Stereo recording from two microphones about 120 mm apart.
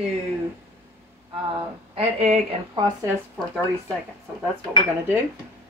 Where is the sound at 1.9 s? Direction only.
60° right (ahead or behind).